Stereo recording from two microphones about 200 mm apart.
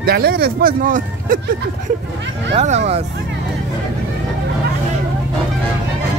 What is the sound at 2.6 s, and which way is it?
Speech, 35° right (ahead or behind).